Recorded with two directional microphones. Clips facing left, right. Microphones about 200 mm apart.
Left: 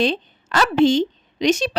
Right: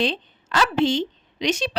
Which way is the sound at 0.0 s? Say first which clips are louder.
Left 4 dB; 45° left (ahead or behind).